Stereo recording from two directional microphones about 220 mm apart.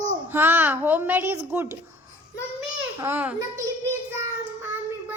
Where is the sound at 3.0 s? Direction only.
10° right (ahead or behind).